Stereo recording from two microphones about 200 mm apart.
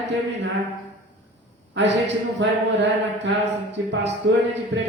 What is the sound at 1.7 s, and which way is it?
A man's voice, 60° right (ahead or behind).